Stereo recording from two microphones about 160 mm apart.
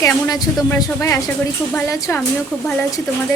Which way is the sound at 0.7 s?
20° left (ahead or behind).